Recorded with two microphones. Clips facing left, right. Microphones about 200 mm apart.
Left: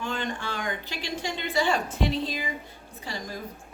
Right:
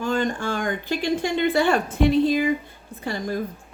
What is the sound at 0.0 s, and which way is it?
A woman's voice, 45° right (ahead or behind).